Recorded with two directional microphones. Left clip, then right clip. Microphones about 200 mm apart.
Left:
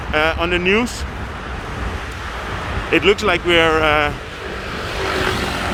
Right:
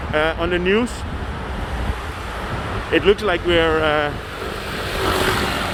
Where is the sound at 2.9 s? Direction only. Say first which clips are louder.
Left 2 dB; 15° left (ahead or behind).